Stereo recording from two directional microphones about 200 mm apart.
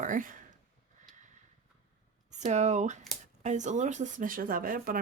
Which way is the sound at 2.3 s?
35° right (ahead or behind).